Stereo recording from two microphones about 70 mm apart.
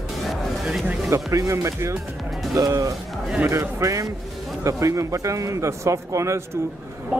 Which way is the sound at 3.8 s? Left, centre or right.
Right.